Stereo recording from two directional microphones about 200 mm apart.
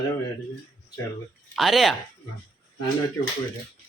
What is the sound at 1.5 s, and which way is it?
Speech, centre (ahead or behind).